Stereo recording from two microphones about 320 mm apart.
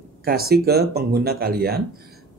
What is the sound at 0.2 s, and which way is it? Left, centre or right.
Speech, right.